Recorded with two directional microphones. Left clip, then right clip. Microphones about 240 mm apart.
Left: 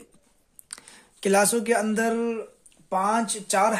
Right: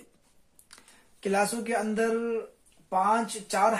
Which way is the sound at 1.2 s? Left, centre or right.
Left.